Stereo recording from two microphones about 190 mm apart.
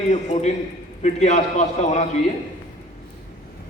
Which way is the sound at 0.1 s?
35° left (ahead or behind).